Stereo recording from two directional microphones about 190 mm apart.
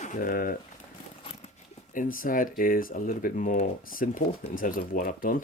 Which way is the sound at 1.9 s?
45° left (ahead or behind).